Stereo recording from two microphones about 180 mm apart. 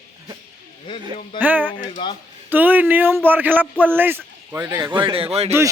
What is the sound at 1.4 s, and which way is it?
Speech, 10° right (ahead or behind).